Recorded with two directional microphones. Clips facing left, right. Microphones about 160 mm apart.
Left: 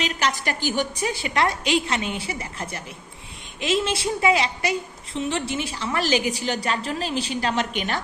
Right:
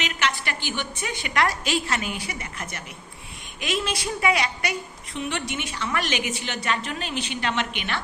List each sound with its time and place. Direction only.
0.0 s a woman's voice: 35° left (ahead or behind)